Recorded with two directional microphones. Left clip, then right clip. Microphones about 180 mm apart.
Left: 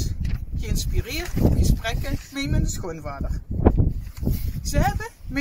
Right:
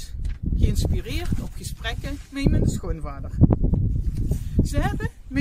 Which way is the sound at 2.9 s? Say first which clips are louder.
Left 3 dB; 30° right (ahead or behind).